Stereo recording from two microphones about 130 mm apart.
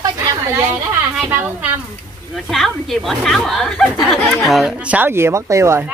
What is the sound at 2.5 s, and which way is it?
Speech, centre (ahead or behind).